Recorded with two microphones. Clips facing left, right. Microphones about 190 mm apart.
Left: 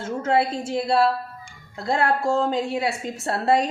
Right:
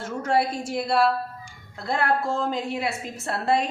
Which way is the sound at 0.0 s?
25° left (ahead or behind).